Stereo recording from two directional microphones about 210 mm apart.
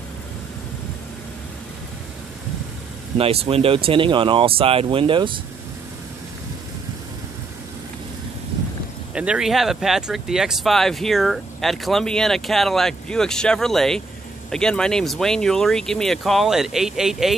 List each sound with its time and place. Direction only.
3.2 s speech: 25° right (ahead or behind)
9.1 s speech: 5° right (ahead or behind)